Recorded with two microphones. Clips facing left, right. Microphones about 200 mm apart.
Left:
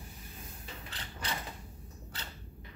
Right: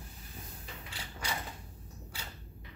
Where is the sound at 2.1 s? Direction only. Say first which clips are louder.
Left 1 dB; 10° right (ahead or behind).